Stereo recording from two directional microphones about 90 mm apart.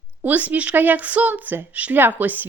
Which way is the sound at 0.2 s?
15° right (ahead or behind).